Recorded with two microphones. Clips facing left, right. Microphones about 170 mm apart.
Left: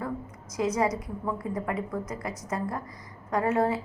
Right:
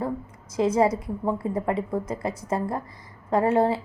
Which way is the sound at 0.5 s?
30° right (ahead or behind).